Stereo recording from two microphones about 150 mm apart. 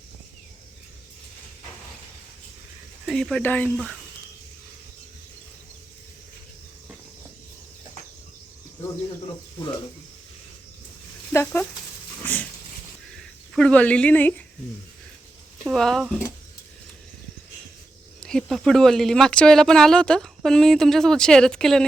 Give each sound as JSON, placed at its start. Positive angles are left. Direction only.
{"t": 3.1, "sound": "speech", "side_deg": 5}
{"t": 12.2, "sound": "a sound", "side_deg": 10}
{"t": 13.1, "sound": "speech", "side_deg": 5}
{"t": 15.6, "sound": "speech", "side_deg": 5}
{"t": 18.2, "sound": "speech", "side_deg": 5}